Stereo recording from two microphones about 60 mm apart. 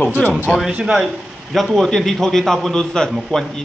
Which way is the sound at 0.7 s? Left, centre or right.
Centre.